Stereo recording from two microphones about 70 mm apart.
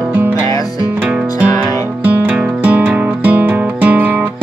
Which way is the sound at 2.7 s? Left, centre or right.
Right.